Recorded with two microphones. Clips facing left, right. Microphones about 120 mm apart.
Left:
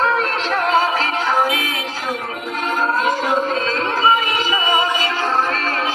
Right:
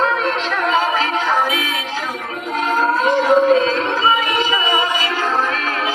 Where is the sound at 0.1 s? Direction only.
40° left (ahead or behind).